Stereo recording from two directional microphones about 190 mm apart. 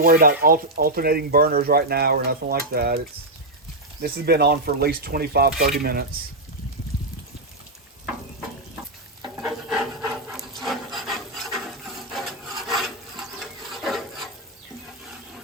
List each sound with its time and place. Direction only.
0.0 s speech: 50° right (ahead or behind)
4.0 s speech: 55° right (ahead or behind)
9.5 s rub: centre (ahead or behind)
10.2 s filing: centre (ahead or behind)